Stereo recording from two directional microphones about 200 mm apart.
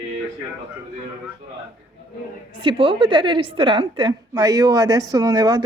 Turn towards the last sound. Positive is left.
turn(degrees=-20)  # may be behind; listen again after turning